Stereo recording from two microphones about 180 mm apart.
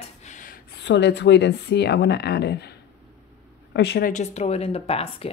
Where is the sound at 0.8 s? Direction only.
75° left (ahead or behind); by 5.3 s 35° left (ahead or behind).